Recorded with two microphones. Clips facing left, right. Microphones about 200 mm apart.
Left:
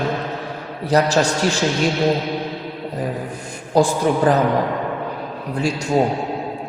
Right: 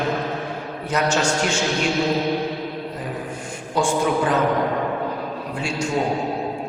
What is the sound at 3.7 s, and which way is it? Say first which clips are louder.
Speech: left 4 dB; 35° left (ahead or behind).